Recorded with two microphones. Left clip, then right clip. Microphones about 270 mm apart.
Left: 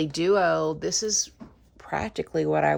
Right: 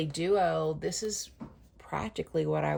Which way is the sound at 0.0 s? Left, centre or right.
Centre.